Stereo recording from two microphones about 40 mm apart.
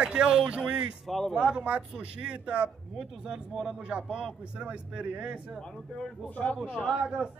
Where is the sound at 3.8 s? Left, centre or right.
Right.